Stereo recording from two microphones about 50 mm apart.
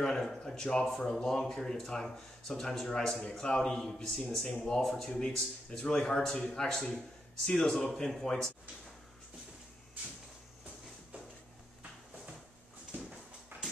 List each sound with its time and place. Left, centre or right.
0.0 s speech: centre